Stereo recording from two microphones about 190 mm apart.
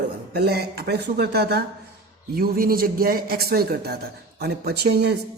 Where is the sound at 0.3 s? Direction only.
55° right (ahead or behind).